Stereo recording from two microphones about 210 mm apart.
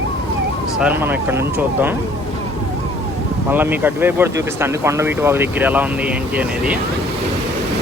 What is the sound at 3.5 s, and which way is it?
Speech, 10° right (ahead or behind).